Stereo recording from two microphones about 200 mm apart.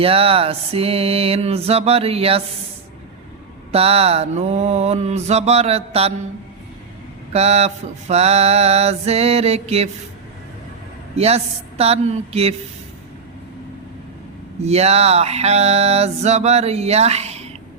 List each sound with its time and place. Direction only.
0.0 s mantra: 30° right (ahead or behind)
3.7 s mantra: 30° right (ahead or behind)
7.3 s mantra: 30° right (ahead or behind)
11.2 s mantra: 30° right (ahead or behind)
14.6 s mantra: 30° right (ahead or behind)